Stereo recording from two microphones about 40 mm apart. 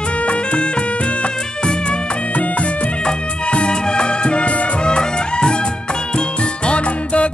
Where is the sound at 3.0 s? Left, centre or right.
Left.